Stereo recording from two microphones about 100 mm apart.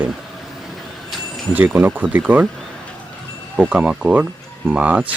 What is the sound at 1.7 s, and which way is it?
Speech, 20° right (ahead or behind).